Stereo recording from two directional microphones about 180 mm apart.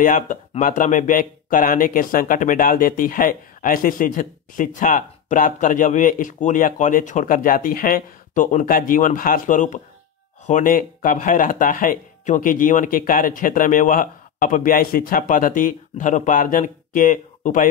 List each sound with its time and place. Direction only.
0.0 s speech: 45° left (ahead or behind)